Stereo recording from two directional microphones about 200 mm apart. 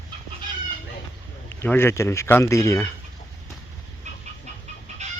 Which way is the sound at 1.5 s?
10° left (ahead or behind).